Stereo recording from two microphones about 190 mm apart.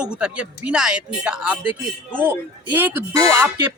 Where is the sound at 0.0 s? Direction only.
5° right (ahead or behind).